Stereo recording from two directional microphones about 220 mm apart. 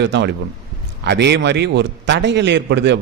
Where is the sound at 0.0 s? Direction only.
50° right (ahead or behind).